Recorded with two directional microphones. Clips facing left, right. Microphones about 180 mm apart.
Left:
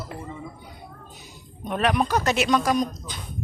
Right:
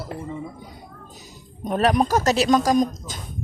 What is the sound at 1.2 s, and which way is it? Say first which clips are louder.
Speech: right 5 dB; 40° right (ahead or behind).